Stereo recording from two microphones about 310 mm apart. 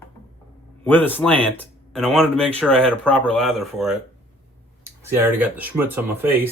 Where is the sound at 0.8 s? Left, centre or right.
Centre.